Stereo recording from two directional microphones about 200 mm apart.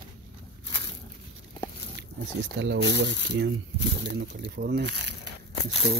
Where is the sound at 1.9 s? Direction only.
60° right (ahead or behind).